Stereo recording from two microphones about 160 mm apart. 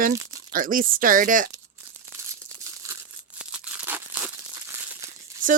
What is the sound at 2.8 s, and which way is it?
Crumpling, 20° right (ahead or behind).